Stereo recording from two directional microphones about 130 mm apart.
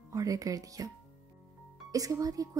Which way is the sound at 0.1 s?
25° right (ahead or behind).